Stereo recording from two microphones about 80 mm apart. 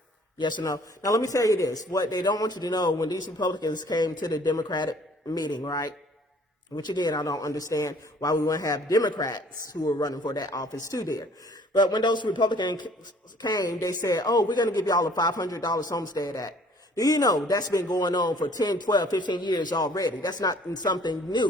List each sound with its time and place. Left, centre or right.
0.6 s a man's voice: left
11.7 s speech: left
13.4 s a man's voice: left